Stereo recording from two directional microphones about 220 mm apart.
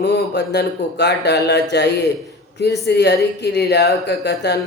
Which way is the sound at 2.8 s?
50° left (ahead or behind).